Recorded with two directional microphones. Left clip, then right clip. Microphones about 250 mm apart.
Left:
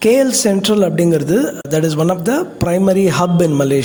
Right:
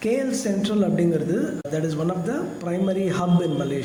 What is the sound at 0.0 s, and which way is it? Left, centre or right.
Speech, left.